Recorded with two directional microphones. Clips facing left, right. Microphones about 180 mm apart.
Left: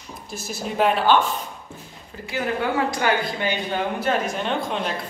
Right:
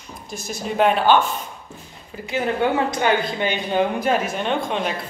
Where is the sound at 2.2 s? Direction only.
20° right (ahead or behind).